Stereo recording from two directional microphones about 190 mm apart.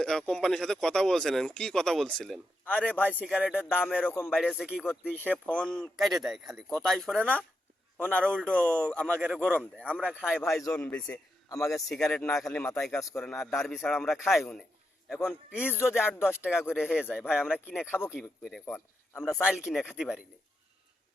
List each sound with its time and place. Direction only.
0.0 s speech: 5° left (ahead or behind)
3.3 s speech: 5° right (ahead or behind)
4.1 s a man's voice: 10° left (ahead or behind)
4.4 s speech: centre (ahead or behind)
5.1 s a man's voice: 10° left (ahead or behind)
9.2 s speech: 5° right (ahead or behind)
9.5 s a man's voice: 5° left (ahead or behind)